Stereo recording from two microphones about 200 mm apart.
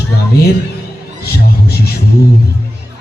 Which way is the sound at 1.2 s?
50° left (ahead or behind).